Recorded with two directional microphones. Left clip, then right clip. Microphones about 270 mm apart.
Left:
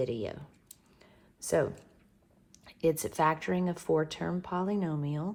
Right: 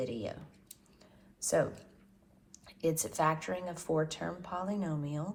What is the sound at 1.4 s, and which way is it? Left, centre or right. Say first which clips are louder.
Speech: left 2 dB; left.